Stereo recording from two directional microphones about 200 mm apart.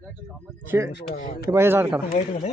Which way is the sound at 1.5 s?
10° right (ahead or behind).